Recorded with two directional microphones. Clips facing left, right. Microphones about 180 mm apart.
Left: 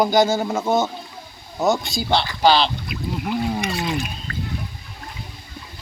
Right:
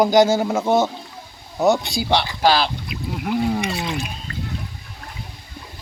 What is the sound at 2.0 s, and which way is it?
Speech, 15° right (ahead or behind).